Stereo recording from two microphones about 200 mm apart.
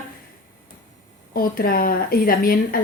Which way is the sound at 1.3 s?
50° left (ahead or behind).